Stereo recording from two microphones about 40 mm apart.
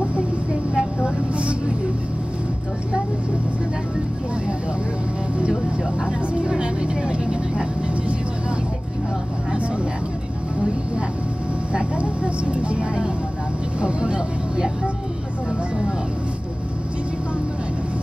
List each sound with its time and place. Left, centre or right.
0.7 s vehicle: right
6.0 s vehicle: right
11.7 s vehicle: right